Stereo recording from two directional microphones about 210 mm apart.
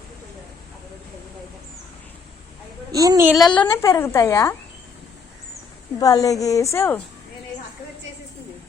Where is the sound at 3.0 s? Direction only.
15° right (ahead or behind).